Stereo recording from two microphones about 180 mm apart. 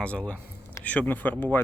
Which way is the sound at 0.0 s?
5° left (ahead or behind).